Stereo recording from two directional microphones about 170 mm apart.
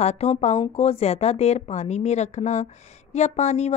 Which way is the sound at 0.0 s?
40° left (ahead or behind).